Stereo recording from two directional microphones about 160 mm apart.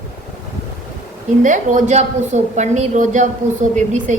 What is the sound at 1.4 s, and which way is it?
A woman's voice, 50° right (ahead or behind).